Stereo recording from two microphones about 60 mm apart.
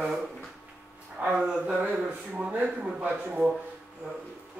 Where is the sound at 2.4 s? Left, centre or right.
Right.